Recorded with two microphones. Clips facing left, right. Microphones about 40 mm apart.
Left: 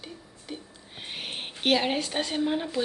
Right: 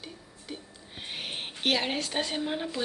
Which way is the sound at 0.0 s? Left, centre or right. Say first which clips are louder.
Left 2 dB; centre.